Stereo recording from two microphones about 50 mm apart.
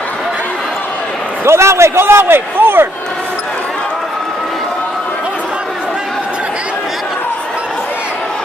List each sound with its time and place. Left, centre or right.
1.4 s a man's voice: right